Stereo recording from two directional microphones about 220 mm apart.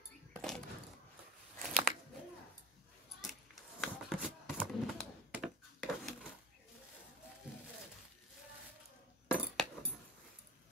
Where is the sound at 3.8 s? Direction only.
Centre (ahead or behind).